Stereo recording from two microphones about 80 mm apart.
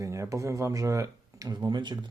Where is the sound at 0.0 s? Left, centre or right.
Right.